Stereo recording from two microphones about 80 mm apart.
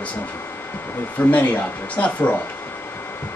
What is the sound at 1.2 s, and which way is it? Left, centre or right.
Speech, centre.